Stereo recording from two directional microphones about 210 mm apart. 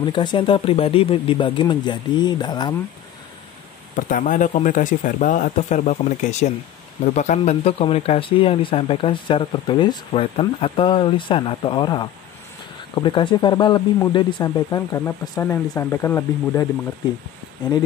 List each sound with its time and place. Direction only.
0.0 s speech: 20° left (ahead or behind)
3.9 s speech: 40° left (ahead or behind); by 16.6 s 15° left (ahead or behind)